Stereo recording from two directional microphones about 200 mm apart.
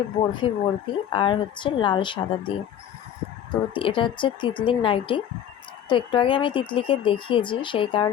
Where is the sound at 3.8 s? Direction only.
25° left (ahead or behind).